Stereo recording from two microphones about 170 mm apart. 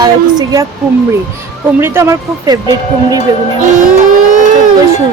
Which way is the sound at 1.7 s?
15° right (ahead or behind).